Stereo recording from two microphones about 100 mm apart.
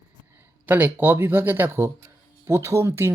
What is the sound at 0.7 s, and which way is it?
Speech, 20° right (ahead or behind).